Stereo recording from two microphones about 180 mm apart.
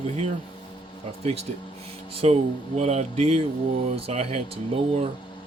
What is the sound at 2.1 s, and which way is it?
Speech, 35° right (ahead or behind).